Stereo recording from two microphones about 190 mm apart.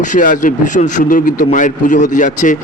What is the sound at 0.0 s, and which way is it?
A man's voice, 40° left (ahead or behind).